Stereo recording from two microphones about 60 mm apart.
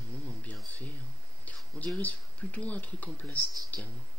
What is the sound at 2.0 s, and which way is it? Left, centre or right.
Speech, left.